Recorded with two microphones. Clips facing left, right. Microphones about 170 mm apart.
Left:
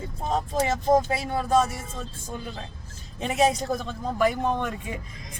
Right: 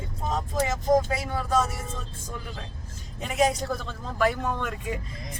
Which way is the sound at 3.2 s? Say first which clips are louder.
Left 2 dB; 20° left (ahead or behind).